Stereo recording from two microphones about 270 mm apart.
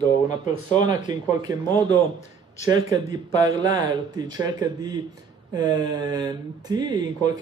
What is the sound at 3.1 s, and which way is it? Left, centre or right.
Speech, centre.